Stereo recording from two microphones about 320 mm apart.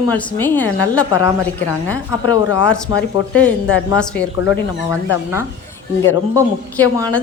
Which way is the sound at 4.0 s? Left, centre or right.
Centre.